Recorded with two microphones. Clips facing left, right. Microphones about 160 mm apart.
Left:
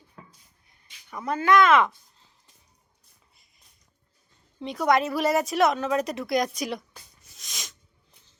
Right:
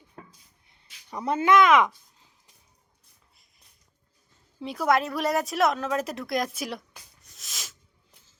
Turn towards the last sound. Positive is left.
turn(degrees=0)  # may be behind; listen again after turning